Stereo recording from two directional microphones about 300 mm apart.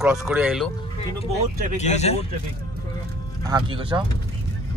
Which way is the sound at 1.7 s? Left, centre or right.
Left.